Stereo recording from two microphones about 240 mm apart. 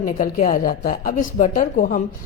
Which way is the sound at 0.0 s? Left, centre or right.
Left.